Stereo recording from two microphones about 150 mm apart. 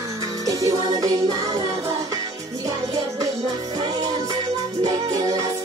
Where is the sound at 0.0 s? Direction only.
20° right (ahead or behind).